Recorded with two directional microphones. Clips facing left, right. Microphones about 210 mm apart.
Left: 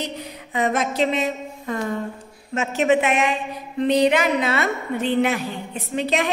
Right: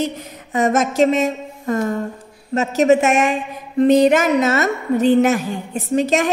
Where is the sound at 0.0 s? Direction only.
45° right (ahead or behind).